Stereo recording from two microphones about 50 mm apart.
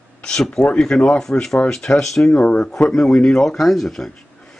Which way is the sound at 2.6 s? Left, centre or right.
Centre.